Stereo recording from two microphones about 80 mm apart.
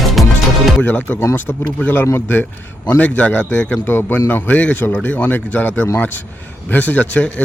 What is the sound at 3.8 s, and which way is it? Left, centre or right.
A man's voice, left.